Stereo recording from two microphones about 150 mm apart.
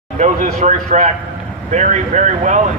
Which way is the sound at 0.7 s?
55° right (ahead or behind).